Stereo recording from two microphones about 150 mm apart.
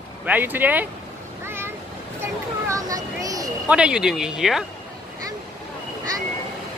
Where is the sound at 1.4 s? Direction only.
15° right (ahead or behind).